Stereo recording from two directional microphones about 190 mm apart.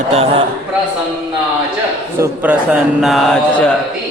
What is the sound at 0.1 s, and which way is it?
Speech, 30° right (ahead or behind).